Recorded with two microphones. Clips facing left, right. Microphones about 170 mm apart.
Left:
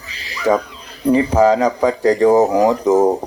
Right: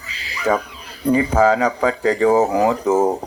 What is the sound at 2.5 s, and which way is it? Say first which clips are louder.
Speech: left 3 dB; 40° left (ahead or behind).